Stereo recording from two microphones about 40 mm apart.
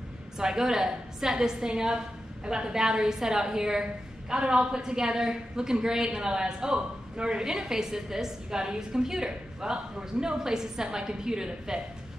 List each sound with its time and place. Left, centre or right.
0.4 s a woman's voice: centre